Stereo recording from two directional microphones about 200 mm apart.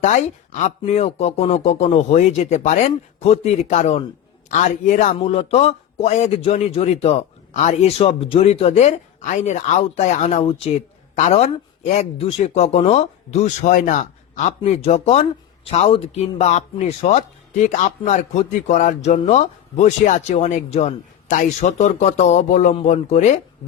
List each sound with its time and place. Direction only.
0.0 s speech: 35° left (ahead or behind)